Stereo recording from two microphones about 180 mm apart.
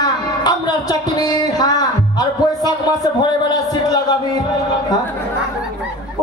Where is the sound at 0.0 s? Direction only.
25° left (ahead or behind).